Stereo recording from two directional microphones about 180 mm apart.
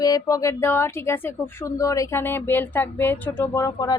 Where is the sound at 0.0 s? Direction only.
20° left (ahead or behind).